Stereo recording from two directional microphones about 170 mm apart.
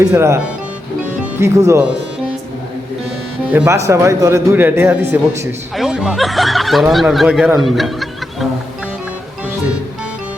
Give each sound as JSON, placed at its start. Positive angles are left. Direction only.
{"t": 0.0, "sound": "a man's voice", "side_deg": -15}
{"t": 3.5, "sound": "a man's voice", "side_deg": -10}
{"t": 7.6, "sound": "a sound", "side_deg": 0}